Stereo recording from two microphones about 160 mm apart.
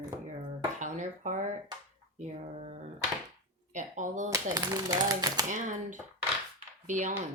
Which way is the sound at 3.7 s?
50° right (ahead or behind).